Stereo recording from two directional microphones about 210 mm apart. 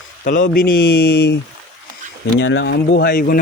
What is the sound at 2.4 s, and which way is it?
Speech, 60° left (ahead or behind).